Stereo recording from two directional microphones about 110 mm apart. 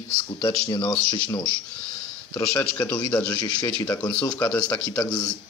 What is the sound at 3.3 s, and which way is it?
Speech, 40° left (ahead or behind).